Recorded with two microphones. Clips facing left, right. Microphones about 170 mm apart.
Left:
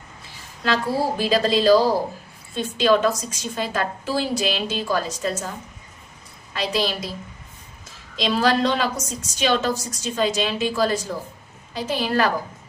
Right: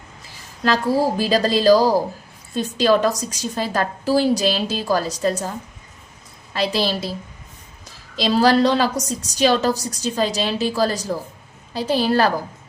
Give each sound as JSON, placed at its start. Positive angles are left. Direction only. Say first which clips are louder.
{"t": 1.2, "sound": "a woman's voice", "louder": "right 2 dB", "side_deg": -40}
{"t": 6.5, "sound": "a woman's voice", "louder": "right 3 dB", "side_deg": -35}
{"t": 8.1, "sound": "a woman's voice", "louder": "right 4 dB", "side_deg": -35}